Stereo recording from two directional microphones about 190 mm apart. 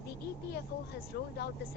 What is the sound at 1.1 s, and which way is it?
Speech, 55° left (ahead or behind).